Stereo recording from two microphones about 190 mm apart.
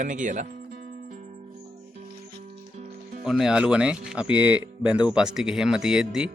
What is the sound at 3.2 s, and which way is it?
Speech, 5° right (ahead or behind).